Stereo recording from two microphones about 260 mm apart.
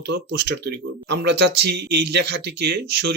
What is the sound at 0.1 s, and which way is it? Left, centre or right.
Speech, right.